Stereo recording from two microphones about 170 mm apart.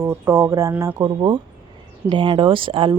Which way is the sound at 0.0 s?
15° right (ahead or behind).